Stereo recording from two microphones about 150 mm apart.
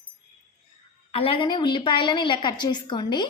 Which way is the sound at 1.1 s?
35° left (ahead or behind).